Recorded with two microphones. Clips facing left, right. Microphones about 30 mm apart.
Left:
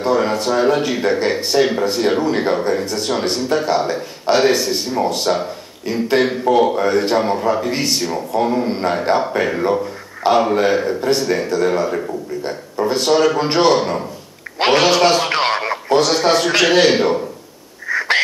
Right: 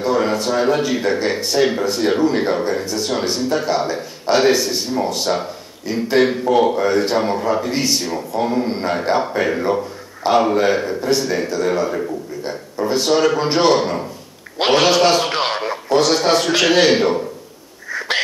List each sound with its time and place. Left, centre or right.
0.0 s a man's voice: centre
13.1 s speech: centre
15.3 s radio: left
16.0 s speech: centre
17.9 s a sound: left